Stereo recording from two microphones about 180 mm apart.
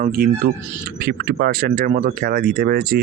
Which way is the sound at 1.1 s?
70° right (ahead or behind).